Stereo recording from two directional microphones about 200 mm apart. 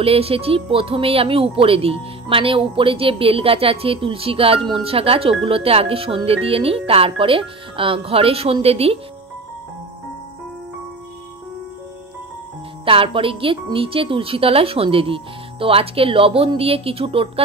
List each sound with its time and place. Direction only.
0.0 s speech: 30° right (ahead or behind)
12.8 s speech: 25° right (ahead or behind)